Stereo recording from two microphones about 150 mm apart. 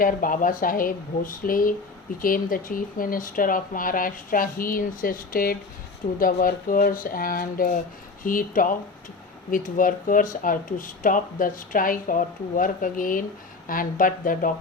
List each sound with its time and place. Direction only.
0.0 s speech: 65° left (ahead or behind)